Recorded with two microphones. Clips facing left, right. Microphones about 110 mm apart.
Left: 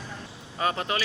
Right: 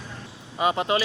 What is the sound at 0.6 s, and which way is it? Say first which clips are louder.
Speech: right 5 dB; 20° right (ahead or behind).